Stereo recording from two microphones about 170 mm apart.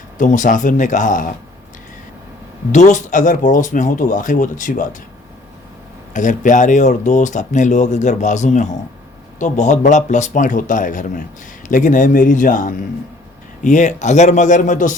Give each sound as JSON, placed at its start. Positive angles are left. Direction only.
{"t": 0.2, "sound": "speech", "side_deg": 50}
{"t": 2.7, "sound": "speech", "side_deg": 45}
{"t": 6.1, "sound": "speech", "side_deg": 50}